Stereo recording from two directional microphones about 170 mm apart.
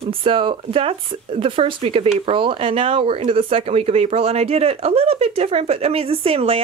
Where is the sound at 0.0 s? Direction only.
30° right (ahead or behind).